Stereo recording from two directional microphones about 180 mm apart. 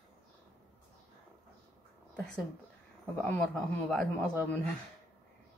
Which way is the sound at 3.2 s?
5° left (ahead or behind).